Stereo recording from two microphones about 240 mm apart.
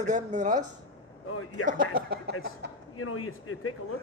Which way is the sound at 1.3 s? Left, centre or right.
Left.